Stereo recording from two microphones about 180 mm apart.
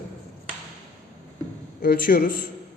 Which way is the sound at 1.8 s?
55° left (ahead or behind).